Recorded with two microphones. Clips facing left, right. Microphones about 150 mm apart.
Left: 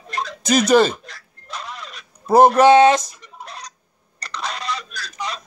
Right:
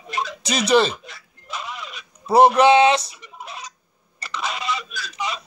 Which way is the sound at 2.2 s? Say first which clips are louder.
Left 2 dB; 45° left (ahead or behind).